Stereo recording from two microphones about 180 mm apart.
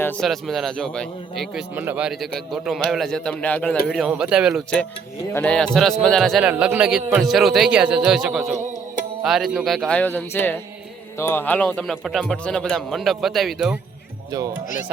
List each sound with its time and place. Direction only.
0.0 s speech: 5° left (ahead or behind)
1.7 s speech: 10° right (ahead or behind)
8.5 s music: 45° right (ahead or behind)
9.2 s speech: centre (ahead or behind)
14.3 s speech: 20° right (ahead or behind)